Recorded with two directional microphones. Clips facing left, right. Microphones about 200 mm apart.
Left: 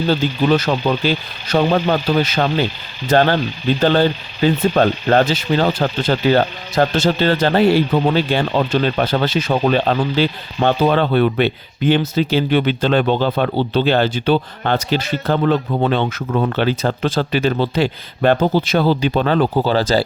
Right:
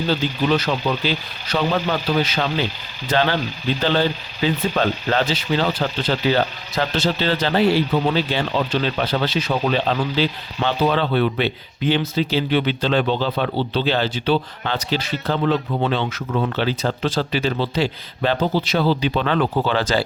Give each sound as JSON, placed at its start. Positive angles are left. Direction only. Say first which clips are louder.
{"t": 0.1, "sound": "speech", "louder": "left 4 dB", "side_deg": 45}